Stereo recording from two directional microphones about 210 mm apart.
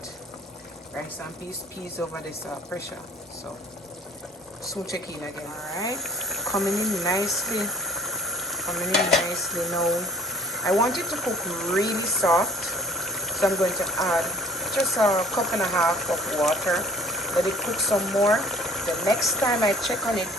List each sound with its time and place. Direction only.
5.7 s speech: 15° left (ahead or behind)
6.0 s speech: centre (ahead or behind)
7.0 s speech: 15° left (ahead or behind)
7.3 s speech: centre (ahead or behind)